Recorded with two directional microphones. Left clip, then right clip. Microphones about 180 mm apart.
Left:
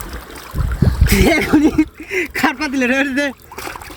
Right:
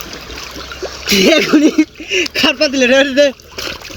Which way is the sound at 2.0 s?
55° left (ahead or behind).